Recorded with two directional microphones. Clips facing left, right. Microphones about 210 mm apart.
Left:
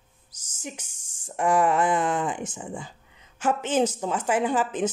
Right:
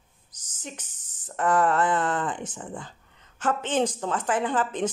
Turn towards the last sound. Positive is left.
turn(degrees=10)  # may be behind; listen again after turning